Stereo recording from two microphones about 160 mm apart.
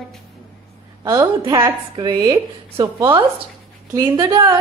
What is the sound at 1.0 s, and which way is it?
A woman's voice, 25° right (ahead or behind).